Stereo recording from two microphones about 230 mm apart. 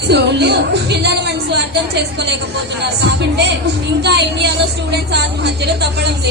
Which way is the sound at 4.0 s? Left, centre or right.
Right.